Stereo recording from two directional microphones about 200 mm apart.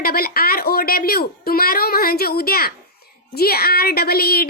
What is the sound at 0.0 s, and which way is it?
A woman's voice, 50° left (ahead or behind).